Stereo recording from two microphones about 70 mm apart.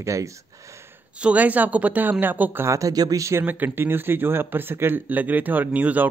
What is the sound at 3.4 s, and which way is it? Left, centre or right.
Speech, right.